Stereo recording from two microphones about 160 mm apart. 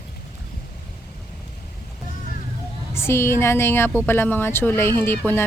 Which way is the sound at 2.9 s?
15° left (ahead or behind).